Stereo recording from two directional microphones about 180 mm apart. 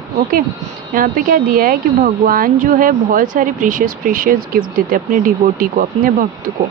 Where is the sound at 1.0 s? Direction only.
50° right (ahead or behind).